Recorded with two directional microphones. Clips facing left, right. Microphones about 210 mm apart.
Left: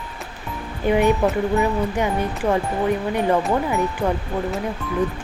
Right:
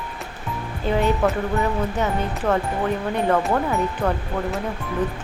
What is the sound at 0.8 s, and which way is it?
Speech, 15° left (ahead or behind).